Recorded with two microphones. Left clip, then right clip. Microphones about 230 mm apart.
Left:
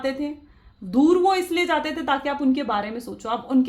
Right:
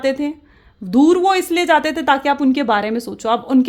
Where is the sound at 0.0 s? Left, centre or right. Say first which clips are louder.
Right 7 dB; right.